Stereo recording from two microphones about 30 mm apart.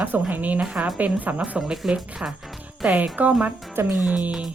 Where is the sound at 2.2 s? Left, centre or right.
Right.